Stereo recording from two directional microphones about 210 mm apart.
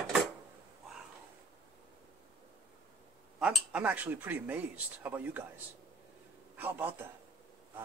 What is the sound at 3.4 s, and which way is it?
Speech, 5° right (ahead or behind).